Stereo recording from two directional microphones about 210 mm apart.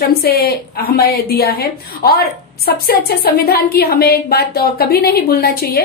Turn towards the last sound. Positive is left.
turn(degrees=45)  # may be behind; listen again after turning